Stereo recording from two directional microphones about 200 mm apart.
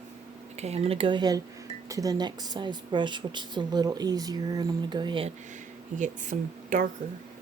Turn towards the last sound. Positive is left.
turn(degrees=-40)  # may be behind; listen again after turning